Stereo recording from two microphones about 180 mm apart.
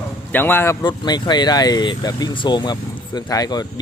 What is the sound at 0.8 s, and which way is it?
Speech, 25° left (ahead or behind).